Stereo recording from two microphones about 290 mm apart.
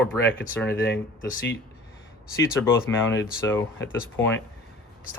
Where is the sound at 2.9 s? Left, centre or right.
Centre.